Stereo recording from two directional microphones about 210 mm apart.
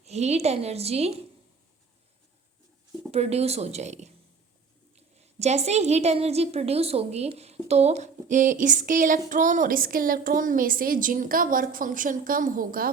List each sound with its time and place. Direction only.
0.0 s a woman's voice: 30° right (ahead or behind)
3.1 s a woman's voice: 30° right (ahead or behind)